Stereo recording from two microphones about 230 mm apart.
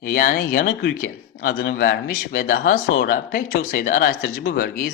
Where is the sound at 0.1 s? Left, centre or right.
Left.